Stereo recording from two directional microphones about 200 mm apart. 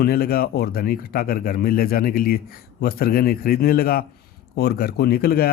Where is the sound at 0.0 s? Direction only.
50° left (ahead or behind).